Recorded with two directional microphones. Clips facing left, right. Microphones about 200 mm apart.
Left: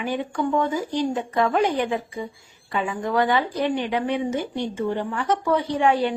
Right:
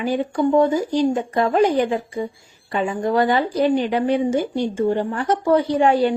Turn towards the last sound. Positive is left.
turn(degrees=-35)  # may be behind; listen again after turning